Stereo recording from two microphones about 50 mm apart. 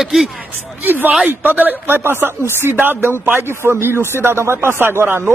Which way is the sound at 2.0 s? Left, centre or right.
Right.